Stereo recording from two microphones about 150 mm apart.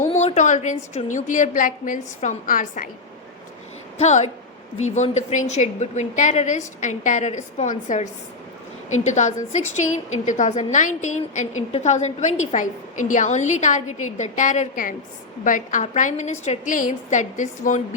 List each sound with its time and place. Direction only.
0.0 s a sound: 50° left (ahead or behind)
0.9 s a woman's voice: 55° left (ahead or behind)
3.9 s a woman's voice: 50° left (ahead or behind)